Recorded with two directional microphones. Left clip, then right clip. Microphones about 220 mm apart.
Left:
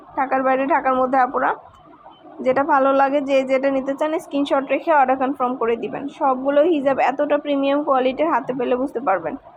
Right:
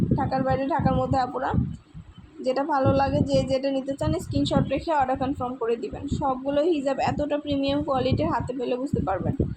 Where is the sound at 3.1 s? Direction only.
35° left (ahead or behind).